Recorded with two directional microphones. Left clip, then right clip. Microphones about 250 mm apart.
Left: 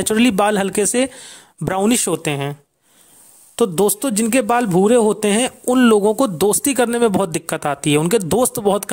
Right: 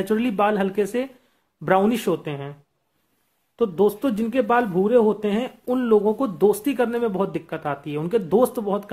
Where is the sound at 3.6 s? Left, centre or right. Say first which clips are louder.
Left 4 dB; left.